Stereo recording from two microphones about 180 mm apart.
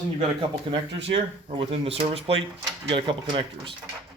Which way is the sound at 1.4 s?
30° right (ahead or behind).